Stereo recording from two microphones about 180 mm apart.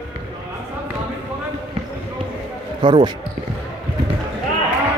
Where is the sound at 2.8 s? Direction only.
25° right (ahead or behind).